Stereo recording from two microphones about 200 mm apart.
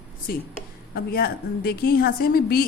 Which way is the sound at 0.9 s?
50° left (ahead or behind).